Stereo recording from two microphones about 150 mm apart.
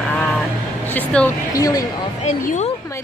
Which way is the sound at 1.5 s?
25° left (ahead or behind).